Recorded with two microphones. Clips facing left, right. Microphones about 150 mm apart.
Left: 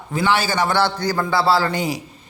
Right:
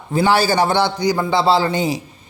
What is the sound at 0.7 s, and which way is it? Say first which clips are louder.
Speech: right 2 dB; 15° right (ahead or behind).